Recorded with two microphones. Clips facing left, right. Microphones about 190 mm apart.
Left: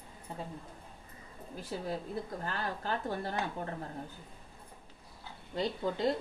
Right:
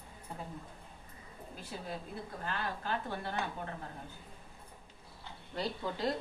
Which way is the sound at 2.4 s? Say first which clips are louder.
Left 1 dB; 40° left (ahead or behind).